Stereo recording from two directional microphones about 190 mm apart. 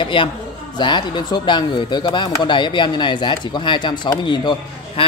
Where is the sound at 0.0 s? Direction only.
25° left (ahead or behind).